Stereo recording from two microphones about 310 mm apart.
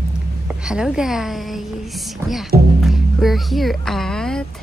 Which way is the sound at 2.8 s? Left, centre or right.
Centre.